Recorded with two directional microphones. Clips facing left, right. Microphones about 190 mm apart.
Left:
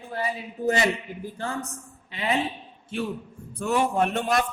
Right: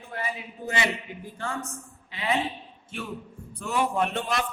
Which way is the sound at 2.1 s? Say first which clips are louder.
Left 2 dB; 35° left (ahead or behind).